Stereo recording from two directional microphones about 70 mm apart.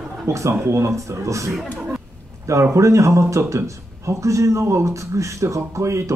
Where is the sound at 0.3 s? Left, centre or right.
Right.